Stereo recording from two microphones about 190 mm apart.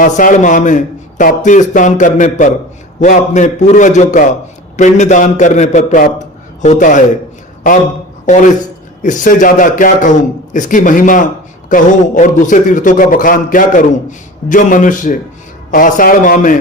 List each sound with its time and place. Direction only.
0.0 s a man's voice: 45° left (ahead or behind)
9.0 s a man's voice: 45° left (ahead or behind)